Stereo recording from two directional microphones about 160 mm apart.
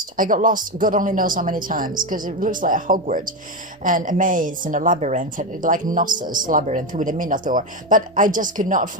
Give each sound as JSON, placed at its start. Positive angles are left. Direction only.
{"t": 0.2, "sound": "speech", "side_deg": -55}